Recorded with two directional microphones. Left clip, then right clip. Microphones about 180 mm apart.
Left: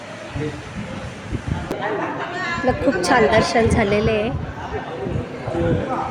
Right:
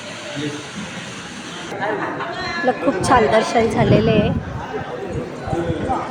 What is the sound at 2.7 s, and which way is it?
A woman's voice, 5° left (ahead or behind).